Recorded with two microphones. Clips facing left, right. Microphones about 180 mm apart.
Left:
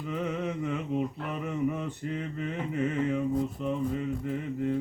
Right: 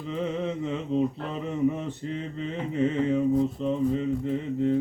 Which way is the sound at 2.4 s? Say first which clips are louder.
Right 5 dB; 25° right (ahead or behind).